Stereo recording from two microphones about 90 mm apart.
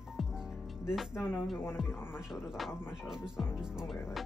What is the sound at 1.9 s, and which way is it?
Speech, 25° left (ahead or behind).